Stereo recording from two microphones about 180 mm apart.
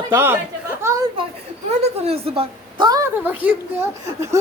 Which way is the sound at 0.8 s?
15° right (ahead or behind).